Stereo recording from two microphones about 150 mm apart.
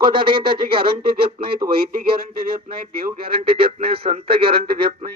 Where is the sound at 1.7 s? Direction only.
90° right.